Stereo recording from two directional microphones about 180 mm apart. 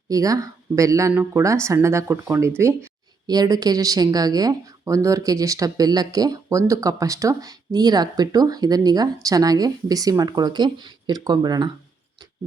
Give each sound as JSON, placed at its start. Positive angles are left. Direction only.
{"t": 0.1, "sound": "a woman's voice", "side_deg": -20}